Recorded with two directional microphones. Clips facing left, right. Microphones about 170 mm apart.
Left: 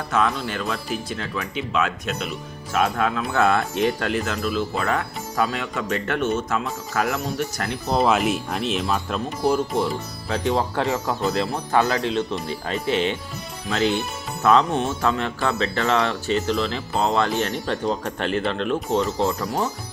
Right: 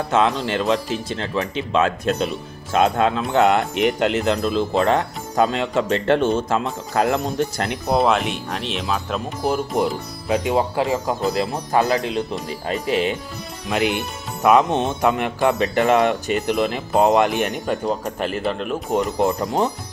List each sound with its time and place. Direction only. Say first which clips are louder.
0.1 s speech: right 3 dB; 25° right (ahead or behind)
7.9 s speech: right 1 dB; centre (ahead or behind)
10.2 s speech: right 3 dB; 15° right (ahead or behind)
11.7 s speech: right 2 dB; 35° right (ahead or behind)
12.7 s speech: right 2 dB; 10° right (ahead or behind)